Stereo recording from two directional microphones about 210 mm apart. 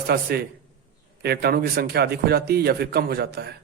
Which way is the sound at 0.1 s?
50° right (ahead or behind).